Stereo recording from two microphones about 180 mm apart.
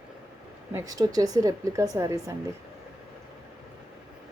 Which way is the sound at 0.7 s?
15° right (ahead or behind).